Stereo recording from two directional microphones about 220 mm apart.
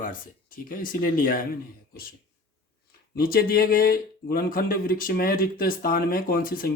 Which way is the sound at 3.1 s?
40° left (ahead or behind).